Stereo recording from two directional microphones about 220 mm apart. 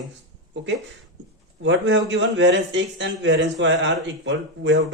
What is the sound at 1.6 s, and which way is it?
A man's voice, 55° right (ahead or behind).